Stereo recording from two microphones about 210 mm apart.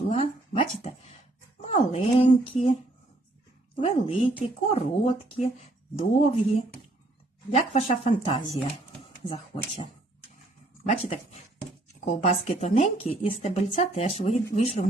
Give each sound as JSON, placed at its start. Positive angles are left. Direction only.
{"t": 0.1, "sound": "a sound", "side_deg": 25}
{"t": 1.6, "sound": "speech", "side_deg": 30}
{"t": 3.8, "sound": "speech", "side_deg": 30}